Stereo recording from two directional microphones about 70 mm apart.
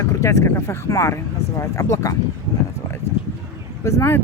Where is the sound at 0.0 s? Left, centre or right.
Left.